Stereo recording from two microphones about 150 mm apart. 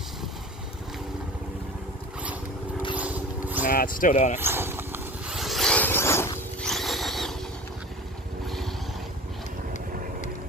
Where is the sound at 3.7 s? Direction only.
65° left (ahead or behind).